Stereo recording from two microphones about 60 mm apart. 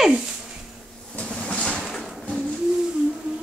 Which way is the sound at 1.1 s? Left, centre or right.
Centre.